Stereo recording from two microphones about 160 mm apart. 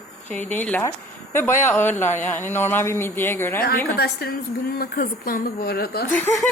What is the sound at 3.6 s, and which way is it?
Speech, 70° left (ahead or behind).